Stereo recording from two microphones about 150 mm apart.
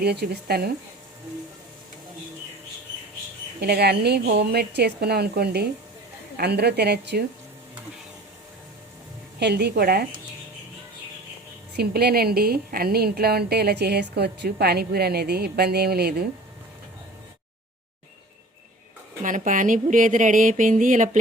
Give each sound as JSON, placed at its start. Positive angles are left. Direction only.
{"t": 0.0, "sound": "a woman's voice", "side_deg": -90}
{"t": 3.6, "sound": "a woman's voice", "side_deg": -90}
{"t": 9.5, "sound": "a woman's voice", "side_deg": -90}
{"t": 11.8, "sound": "a woman's voice", "side_deg": -90}
{"t": 19.2, "sound": "speech", "side_deg": -60}